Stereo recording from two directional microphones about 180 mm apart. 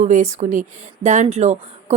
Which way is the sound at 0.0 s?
40° right (ahead or behind).